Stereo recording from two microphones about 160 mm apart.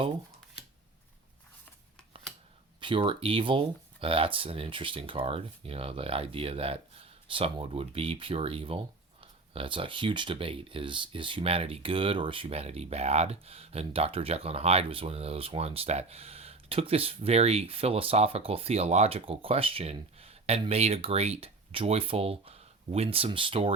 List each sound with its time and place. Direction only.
2.8 s speech: 30° right (ahead or behind)